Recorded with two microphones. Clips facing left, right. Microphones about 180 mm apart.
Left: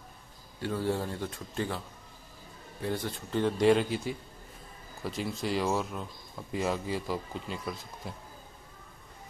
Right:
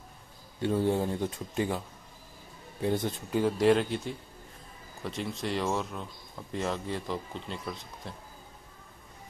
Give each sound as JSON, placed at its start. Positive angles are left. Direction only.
{"t": 0.6, "sound": "speech", "side_deg": -20}
{"t": 2.8, "sound": "speech", "side_deg": -20}
{"t": 3.3, "sound": "speech", "side_deg": 0}